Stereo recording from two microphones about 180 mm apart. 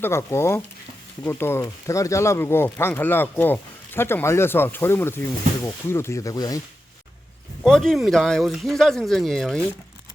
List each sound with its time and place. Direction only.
0.0 s speech: 15° left (ahead or behind)
7.6 s speech: centre (ahead or behind)